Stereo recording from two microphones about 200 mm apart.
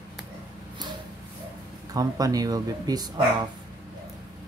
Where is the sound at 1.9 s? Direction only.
20° right (ahead or behind).